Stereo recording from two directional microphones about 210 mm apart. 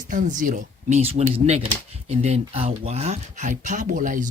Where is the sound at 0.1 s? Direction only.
40° right (ahead or behind).